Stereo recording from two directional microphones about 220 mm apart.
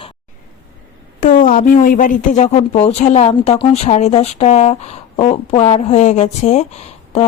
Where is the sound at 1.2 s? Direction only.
40° left (ahead or behind).